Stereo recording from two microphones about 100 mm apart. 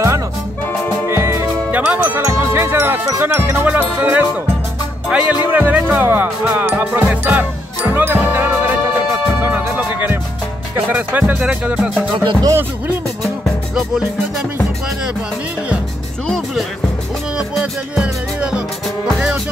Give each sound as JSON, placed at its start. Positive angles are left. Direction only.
{"t": 1.0, "sound": "music", "side_deg": -25}
{"t": 5.1, "sound": "speech", "side_deg": -15}
{"t": 7.1, "sound": "music", "side_deg": -15}
{"t": 9.8, "sound": "music", "side_deg": -15}
{"t": 12.3, "sound": "music", "side_deg": -40}
{"t": 17.4, "sound": "music", "side_deg": -5}